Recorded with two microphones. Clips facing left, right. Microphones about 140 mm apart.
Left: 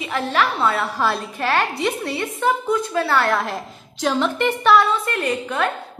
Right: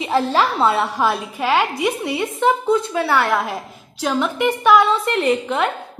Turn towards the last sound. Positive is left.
turn(degrees=-25)  # may be behind; listen again after turning